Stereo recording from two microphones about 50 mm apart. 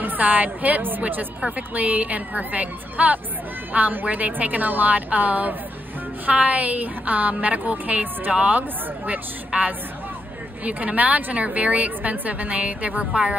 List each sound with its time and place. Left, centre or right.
0.0 s a woman's voice: right
13.1 s speech: centre